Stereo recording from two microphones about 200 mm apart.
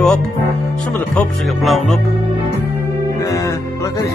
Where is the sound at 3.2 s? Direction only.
15° left (ahead or behind).